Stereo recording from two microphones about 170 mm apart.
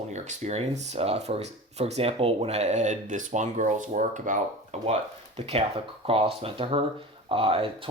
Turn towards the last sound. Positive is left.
turn(degrees=-35)  # may be behind; listen again after turning